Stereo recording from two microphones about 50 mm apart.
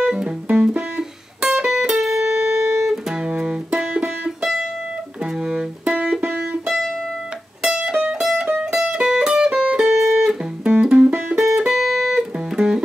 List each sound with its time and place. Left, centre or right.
0.0 s music: centre
2.4 s music: right
2.8 s music: centre
4.4 s music: centre
7.6 s music: centre
11.3 s music: centre